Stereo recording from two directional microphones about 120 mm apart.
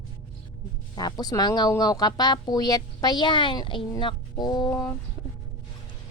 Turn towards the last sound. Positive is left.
turn(degrees=25)  # may be behind; listen again after turning